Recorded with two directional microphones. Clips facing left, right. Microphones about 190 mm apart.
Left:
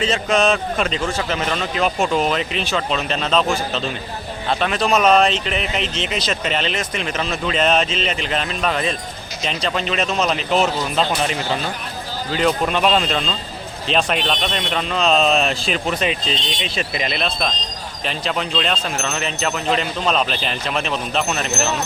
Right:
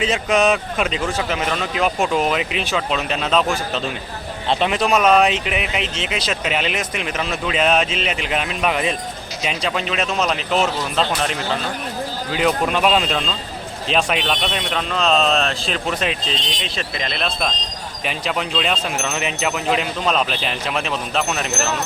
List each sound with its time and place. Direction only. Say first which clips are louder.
0.0 s speech: even; 10° right (ahead or behind)
4.4 s speech: right 1 dB; 15° right (ahead or behind); by 21.8 s centre (ahead or behind)